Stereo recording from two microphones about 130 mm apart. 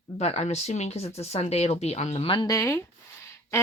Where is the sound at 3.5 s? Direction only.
20° left (ahead or behind).